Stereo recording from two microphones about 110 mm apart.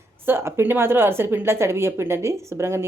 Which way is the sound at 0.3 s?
20° right (ahead or behind).